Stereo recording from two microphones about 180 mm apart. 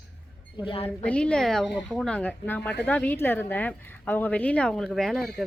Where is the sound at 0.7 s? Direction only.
30° left (ahead or behind).